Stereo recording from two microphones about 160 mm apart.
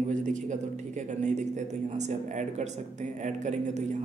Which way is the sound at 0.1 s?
50° right (ahead or behind).